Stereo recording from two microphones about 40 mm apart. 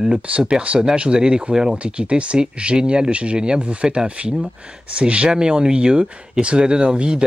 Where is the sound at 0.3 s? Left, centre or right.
Right.